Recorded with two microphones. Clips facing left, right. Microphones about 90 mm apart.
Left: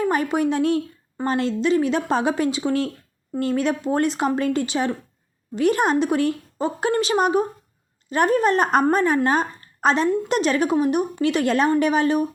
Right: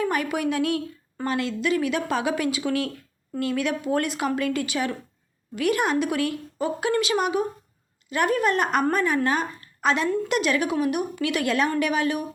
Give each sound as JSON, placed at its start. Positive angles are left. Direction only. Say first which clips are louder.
{"t": 0.0, "sound": "a woman's voice", "louder": "left 4 dB", "side_deg": 30}